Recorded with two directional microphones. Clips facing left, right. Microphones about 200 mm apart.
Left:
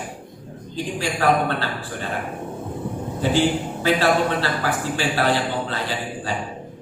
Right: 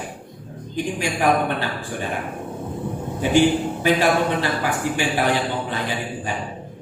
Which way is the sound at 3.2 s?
15° right (ahead or behind).